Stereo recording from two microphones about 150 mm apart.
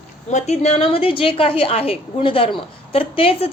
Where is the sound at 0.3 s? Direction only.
50° left (ahead or behind).